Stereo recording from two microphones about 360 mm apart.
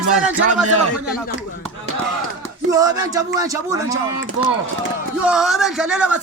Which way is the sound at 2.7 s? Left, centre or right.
Centre.